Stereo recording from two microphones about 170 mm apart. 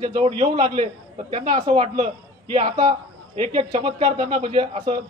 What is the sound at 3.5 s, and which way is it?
Speech, 25° right (ahead or behind).